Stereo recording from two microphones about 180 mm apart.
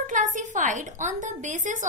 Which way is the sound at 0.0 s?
45° right (ahead or behind).